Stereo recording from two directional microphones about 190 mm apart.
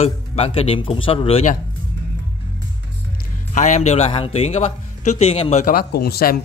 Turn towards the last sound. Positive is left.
turn(degrees=55)  # may be behind; listen again after turning